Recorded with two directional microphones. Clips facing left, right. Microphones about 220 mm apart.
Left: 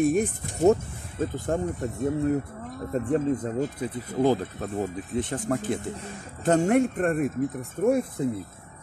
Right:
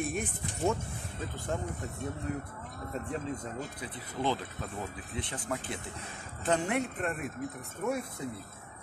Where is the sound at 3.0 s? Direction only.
45° left (ahead or behind).